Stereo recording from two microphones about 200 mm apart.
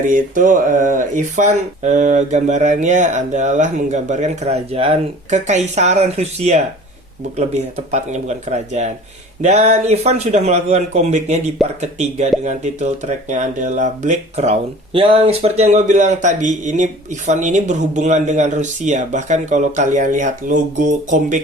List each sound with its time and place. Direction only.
0.1 s speech: 40° right (ahead or behind)